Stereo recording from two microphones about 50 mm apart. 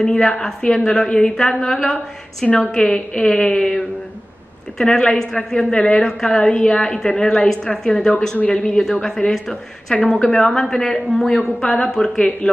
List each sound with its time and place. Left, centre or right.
0.0 s a woman's voice: centre
2.4 s a woman's voice: left
2.7 s a woman's voice: centre